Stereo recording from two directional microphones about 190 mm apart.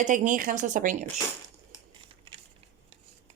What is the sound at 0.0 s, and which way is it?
Speech, 45° right (ahead or behind).